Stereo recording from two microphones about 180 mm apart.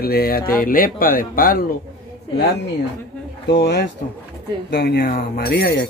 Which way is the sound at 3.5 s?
60° left (ahead or behind).